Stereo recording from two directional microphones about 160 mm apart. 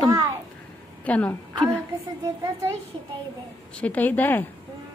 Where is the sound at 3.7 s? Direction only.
10° left (ahead or behind).